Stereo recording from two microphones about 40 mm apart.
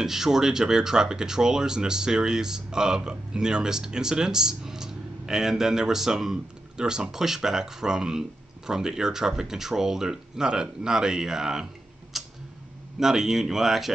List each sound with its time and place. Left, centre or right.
0.0 s speech: centre
12.1 s tick-tock: centre
13.0 s speech: centre